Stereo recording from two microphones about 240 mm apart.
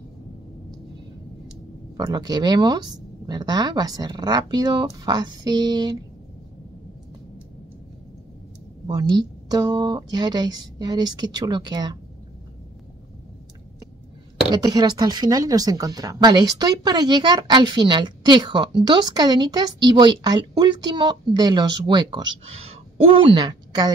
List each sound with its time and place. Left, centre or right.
2.0 s a woman's voice: centre
8.8 s a woman's voice: centre
14.5 s a woman's voice: centre